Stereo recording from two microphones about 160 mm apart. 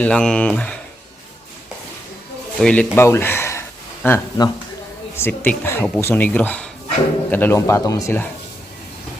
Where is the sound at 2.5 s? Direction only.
5° left (ahead or behind).